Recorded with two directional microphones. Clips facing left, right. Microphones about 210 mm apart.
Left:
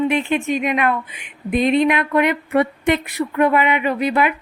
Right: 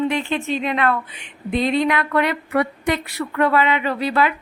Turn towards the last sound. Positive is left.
turn(degrees=20)  # may be behind; listen again after turning